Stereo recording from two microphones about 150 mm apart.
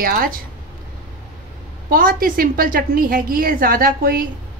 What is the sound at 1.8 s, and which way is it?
A woman's voice, 70° right (ahead or behind).